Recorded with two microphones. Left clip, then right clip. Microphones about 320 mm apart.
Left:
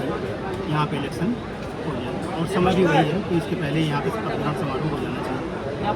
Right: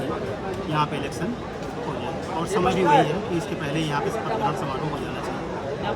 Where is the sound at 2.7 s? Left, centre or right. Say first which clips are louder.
Right 2 dB; right.